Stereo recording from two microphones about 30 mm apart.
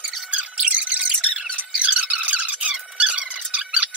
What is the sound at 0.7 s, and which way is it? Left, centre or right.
Music, right.